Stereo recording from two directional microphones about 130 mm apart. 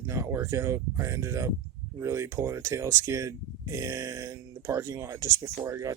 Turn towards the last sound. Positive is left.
turn(degrees=-25)  # may be behind; listen again after turning